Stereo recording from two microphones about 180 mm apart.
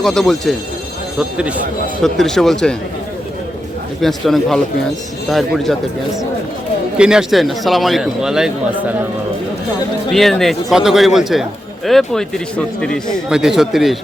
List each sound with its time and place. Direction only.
0.0 s a man's voice: centre (ahead or behind)
4.0 s a man's voice: centre (ahead or behind)
6.9 s a man's voice: 5° right (ahead or behind)
10.1 s a man's voice: centre (ahead or behind)